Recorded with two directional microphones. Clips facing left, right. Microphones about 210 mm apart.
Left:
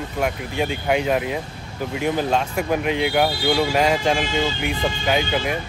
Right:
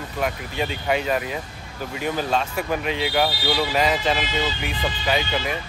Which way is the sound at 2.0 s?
15° left (ahead or behind).